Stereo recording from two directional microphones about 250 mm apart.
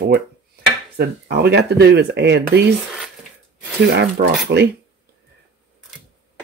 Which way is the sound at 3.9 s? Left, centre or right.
Right.